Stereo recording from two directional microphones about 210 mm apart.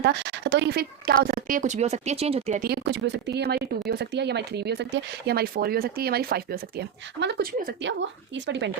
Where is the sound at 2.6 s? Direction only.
55° right (ahead or behind).